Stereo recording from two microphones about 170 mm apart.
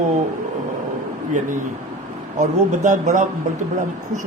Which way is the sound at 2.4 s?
50° right (ahead or behind).